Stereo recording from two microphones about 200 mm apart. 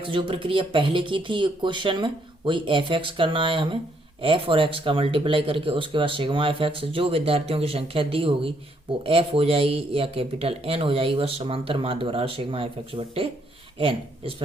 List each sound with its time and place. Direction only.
0.0 s speech: 25° right (ahead or behind)